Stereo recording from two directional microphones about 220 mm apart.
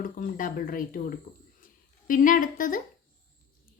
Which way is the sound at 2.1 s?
40° left (ahead or behind).